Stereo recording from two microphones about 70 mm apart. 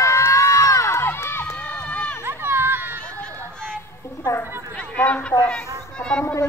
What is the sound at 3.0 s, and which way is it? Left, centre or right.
Run, centre.